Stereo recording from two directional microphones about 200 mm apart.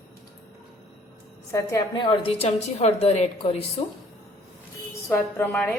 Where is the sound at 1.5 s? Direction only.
20° left (ahead or behind).